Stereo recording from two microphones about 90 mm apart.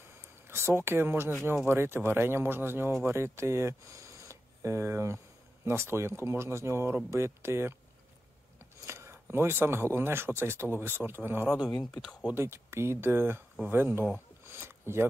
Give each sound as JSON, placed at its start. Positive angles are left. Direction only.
{"t": 0.5, "sound": "speech", "side_deg": -30}
{"t": 8.8, "sound": "speech", "side_deg": -30}
{"t": 11.8, "sound": "speech", "side_deg": 5}
{"t": 12.4, "sound": "speech", "side_deg": -30}
{"t": 14.4, "sound": "a sound", "side_deg": -25}